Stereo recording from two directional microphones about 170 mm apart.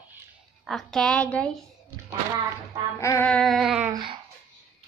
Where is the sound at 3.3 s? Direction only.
Centre (ahead or behind).